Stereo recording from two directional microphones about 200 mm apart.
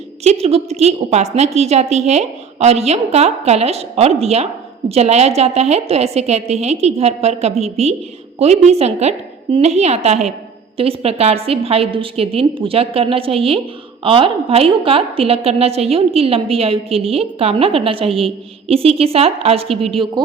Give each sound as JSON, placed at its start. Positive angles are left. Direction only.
{"t": 0.3, "sound": "a woman's voice", "side_deg": -30}